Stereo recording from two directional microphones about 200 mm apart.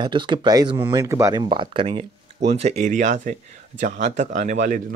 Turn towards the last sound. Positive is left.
turn(degrees=-40)  # may be behind; listen again after turning